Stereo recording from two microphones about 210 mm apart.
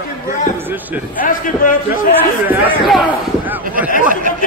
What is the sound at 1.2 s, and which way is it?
Speech, 40° left (ahead or behind).